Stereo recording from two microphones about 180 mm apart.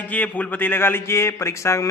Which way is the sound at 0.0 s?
10° left (ahead or behind).